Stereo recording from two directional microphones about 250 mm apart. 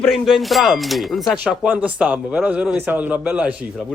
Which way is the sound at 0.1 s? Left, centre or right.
Centre.